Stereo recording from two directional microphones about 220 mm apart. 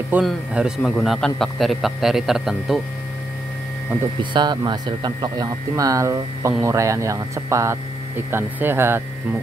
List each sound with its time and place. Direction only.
0.1 s a man's voice: centre (ahead or behind)
4.2 s speech: 20° right (ahead or behind)